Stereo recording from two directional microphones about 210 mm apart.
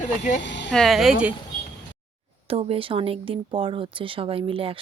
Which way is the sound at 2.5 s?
25° right (ahead or behind).